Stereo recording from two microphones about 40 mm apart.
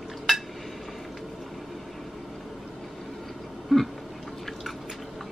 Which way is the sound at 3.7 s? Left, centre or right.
Centre.